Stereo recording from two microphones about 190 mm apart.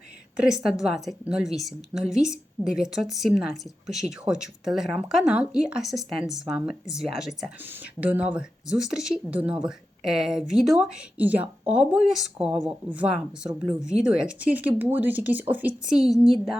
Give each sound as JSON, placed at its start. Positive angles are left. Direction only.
{"t": 0.3, "sound": "speech", "side_deg": -5}